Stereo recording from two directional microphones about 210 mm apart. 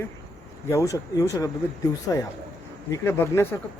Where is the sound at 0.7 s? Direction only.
15° left (ahead or behind).